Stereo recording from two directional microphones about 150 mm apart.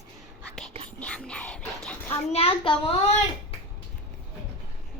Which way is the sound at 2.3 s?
40° left (ahead or behind).